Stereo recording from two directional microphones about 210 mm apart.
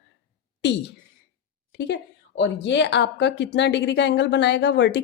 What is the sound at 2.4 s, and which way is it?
Speech, 55° left (ahead or behind).